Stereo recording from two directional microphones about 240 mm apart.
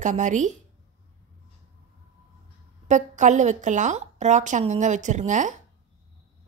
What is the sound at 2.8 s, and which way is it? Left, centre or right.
A woman's voice, right.